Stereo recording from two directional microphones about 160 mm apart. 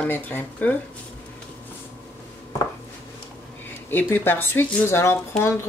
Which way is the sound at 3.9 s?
15° left (ahead or behind).